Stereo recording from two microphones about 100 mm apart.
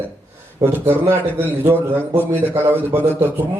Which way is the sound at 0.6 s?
20° right (ahead or behind).